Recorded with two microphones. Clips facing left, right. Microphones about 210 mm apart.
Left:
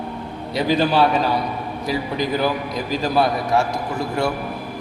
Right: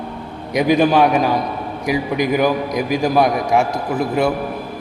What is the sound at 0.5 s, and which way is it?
A man's voice, 15° right (ahead or behind).